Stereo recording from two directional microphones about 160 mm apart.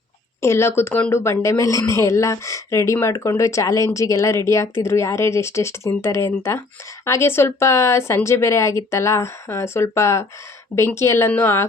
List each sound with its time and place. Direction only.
0.4 s speech: 15° left (ahead or behind)